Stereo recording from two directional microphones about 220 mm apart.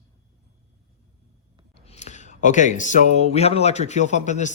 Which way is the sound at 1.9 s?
30° left (ahead or behind).